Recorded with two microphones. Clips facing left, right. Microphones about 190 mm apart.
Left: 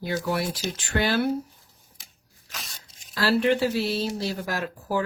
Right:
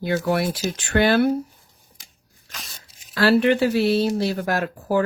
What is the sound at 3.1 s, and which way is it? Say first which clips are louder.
Speech: right 5 dB; 65° right (ahead or behind).